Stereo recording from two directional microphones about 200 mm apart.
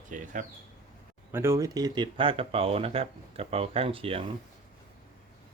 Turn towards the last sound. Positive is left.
turn(degrees=-30)  # may be behind; listen again after turning